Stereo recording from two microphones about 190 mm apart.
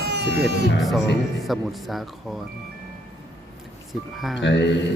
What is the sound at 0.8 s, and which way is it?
Speech, centre (ahead or behind).